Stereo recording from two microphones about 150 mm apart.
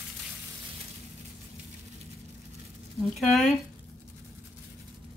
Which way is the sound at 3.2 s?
Centre (ahead or behind).